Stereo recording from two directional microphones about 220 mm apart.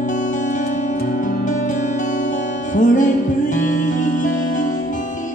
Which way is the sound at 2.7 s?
35° left (ahead or behind).